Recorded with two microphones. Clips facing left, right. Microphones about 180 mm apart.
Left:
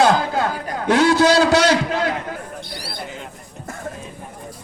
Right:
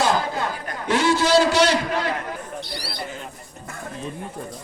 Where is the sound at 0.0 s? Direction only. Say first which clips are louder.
Left 5 dB; 80° left.